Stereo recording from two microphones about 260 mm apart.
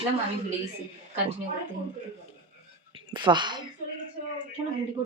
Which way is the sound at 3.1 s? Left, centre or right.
Centre.